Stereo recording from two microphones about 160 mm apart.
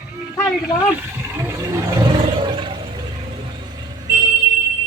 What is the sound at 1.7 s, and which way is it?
Roar, 25° right (ahead or behind).